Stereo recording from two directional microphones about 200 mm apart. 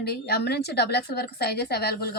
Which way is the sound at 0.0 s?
50° left (ahead or behind).